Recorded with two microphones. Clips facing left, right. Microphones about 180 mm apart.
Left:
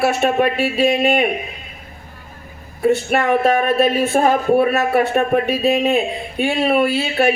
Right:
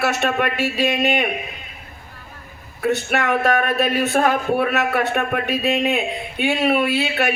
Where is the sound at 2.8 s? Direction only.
30° left (ahead or behind).